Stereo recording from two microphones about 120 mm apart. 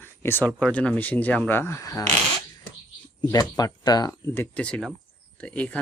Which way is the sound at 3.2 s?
35° left (ahead or behind).